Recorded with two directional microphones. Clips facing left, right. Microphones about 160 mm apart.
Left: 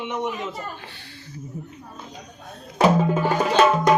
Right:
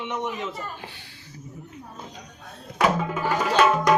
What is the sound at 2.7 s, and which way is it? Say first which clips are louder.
Music: left 5 dB; 30° left (ahead or behind).